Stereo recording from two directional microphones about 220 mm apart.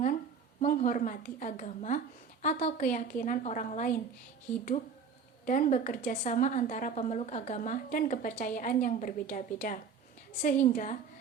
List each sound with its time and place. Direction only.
0.6 s a woman's voice: 35° left (ahead or behind)
5.5 s a woman's voice: 35° left (ahead or behind)